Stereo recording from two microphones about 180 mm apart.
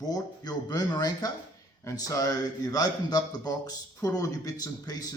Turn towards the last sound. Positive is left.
turn(degrees=20)  # may be behind; listen again after turning